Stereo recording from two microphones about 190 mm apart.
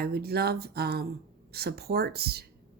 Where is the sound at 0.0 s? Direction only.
55° right (ahead or behind).